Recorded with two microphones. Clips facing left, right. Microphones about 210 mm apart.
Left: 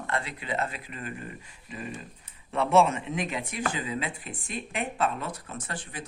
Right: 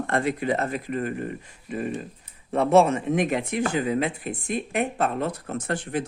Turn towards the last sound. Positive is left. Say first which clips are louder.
# right 11 dB
turn(degrees=-65)  # may be behind; listen again after turning